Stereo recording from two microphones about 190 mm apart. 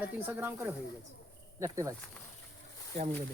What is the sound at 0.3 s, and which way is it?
Speech, 10° right (ahead or behind).